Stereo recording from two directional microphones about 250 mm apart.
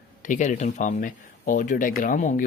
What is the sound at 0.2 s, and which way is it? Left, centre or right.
Speech, left.